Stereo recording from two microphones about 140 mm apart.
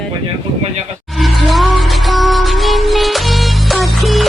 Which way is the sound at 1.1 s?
Centre (ahead or behind).